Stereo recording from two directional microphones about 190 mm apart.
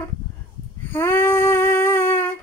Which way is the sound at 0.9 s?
10° left (ahead or behind).